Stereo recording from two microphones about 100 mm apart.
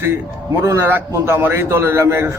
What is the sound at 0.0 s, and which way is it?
A man's voice, 25° right (ahead or behind).